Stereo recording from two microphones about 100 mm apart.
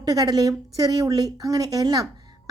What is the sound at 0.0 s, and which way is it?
A woman's voice, 40° right (ahead or behind).